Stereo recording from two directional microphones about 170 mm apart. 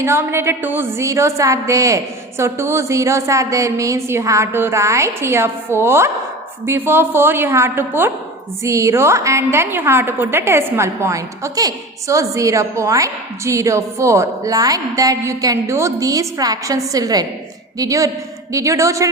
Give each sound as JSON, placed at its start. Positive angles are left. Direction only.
{"t": 0.0, "sound": "a woman's voice", "side_deg": -15}